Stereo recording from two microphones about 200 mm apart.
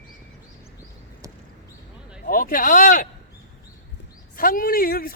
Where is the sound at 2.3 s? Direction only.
45° left (ahead or behind).